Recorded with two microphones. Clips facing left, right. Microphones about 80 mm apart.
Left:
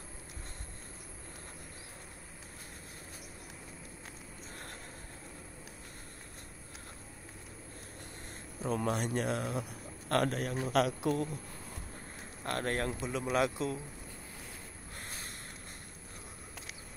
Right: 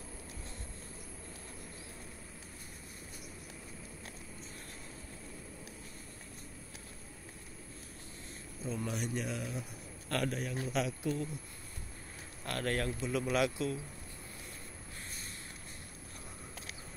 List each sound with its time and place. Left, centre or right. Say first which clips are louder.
8.6 s speech: left 6 dB; left
8.9 s a man's voice: left 4 dB; left
10.5 s a man's voice: left 5 dB; left
12.4 s a man's voice: left 1 dB; left